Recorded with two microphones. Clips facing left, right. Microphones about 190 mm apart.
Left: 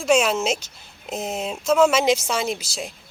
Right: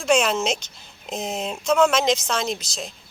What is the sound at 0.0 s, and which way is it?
Speech, 5° left (ahead or behind).